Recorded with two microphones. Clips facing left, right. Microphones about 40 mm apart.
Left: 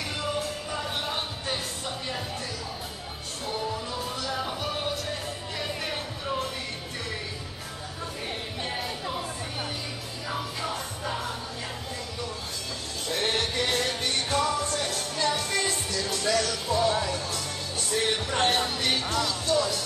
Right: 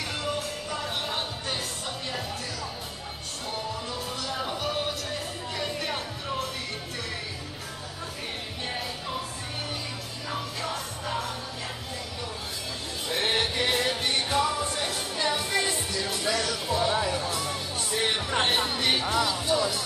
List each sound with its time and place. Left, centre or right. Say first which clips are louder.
0.2 s music: left 1 dB; centre
3.4 s music: left 2 dB; centre
8.6 s music: left 1 dB; centre
10.3 s music: even; centre
13.1 s music: right 1 dB; centre